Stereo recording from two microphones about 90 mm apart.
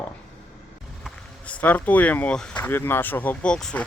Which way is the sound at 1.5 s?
15° left (ahead or behind).